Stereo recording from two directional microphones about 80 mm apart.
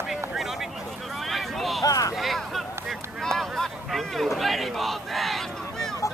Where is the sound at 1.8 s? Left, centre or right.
Left.